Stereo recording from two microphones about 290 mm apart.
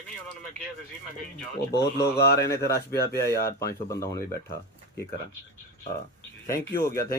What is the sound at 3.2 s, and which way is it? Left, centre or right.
Speech, centre.